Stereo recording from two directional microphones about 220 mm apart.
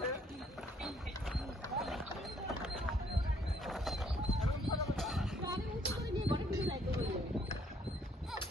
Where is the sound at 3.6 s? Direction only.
Centre (ahead or behind).